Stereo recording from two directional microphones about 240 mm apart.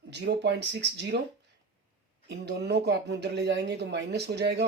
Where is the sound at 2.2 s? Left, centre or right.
Right.